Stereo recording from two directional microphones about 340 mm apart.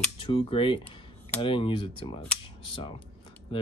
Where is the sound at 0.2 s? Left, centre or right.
Centre.